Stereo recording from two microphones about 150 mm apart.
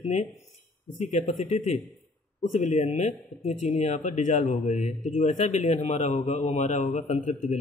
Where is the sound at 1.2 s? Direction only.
50° left (ahead or behind).